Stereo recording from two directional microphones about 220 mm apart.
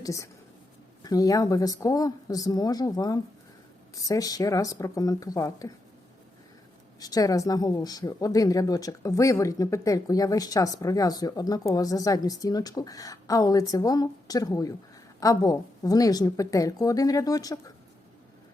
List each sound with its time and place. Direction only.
0.0 s speech: 15° left (ahead or behind)
7.0 s speech: 15° left (ahead or behind)